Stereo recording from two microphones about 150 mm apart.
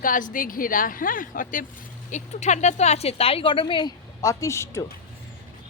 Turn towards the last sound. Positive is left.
turn(degrees=20)  # may be behind; listen again after turning